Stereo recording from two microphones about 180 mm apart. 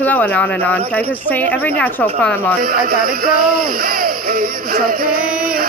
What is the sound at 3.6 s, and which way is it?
Music, 55° right (ahead or behind).